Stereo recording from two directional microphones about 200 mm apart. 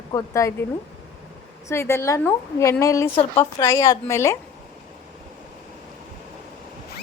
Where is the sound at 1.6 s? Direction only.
15° left (ahead or behind).